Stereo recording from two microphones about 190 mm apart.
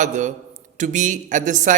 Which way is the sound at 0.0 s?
40° right (ahead or behind).